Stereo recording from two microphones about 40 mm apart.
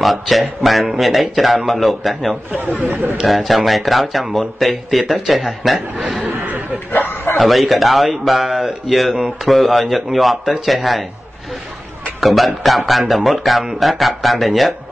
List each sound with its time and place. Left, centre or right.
0.0 s speech: centre
6.9 s bow-wow: left
7.3 s speech: centre
9.1 s speech: centre
9.5 s speech: centre
12.2 s speech: centre